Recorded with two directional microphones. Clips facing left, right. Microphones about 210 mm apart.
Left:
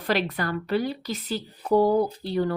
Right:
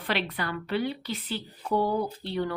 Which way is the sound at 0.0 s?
45° left (ahead or behind).